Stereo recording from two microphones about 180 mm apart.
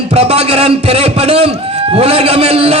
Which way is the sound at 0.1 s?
35° right (ahead or behind).